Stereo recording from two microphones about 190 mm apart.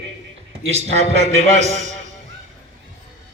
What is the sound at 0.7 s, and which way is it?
A man's voice, 35° right (ahead or behind).